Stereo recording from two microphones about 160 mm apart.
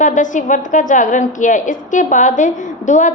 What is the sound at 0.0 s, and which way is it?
A woman's voice, 55° left (ahead or behind).